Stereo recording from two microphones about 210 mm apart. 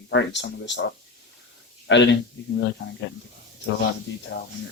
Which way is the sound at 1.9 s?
60° left (ahead or behind).